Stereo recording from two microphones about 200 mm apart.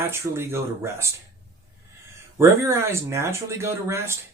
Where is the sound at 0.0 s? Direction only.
10° right (ahead or behind).